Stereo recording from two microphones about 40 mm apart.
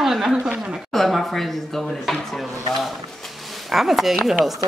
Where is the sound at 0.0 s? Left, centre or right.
Centre.